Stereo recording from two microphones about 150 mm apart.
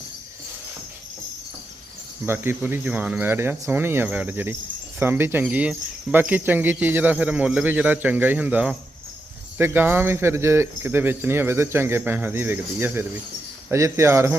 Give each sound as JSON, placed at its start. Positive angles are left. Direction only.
{"t": 2.2, "sound": "speech", "side_deg": -15}